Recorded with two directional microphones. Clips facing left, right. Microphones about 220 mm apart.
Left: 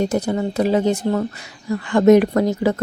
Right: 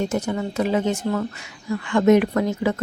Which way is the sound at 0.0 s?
35° left (ahead or behind).